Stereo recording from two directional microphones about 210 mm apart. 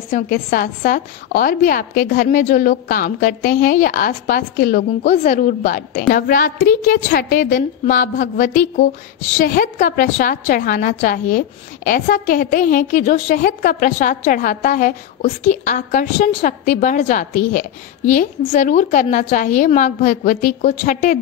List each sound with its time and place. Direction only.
0.1 s a woman's voice: 45° left (ahead or behind)